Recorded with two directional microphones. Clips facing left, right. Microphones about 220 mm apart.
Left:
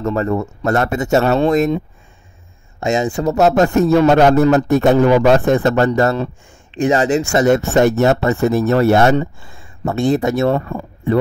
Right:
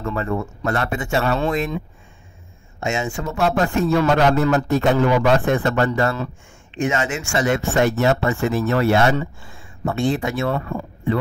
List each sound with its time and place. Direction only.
0.0 s speech: 40° left (ahead or behind)
2.8 s a man's voice: 35° left (ahead or behind)
6.1 s speech: 30° left (ahead or behind)